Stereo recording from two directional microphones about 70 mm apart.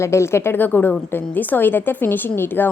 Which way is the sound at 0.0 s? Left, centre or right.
Left.